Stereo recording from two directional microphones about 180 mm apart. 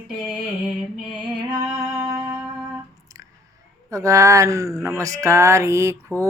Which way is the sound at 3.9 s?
15° right (ahead or behind).